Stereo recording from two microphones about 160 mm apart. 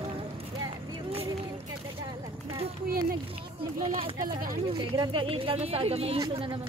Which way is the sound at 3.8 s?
35° right (ahead or behind).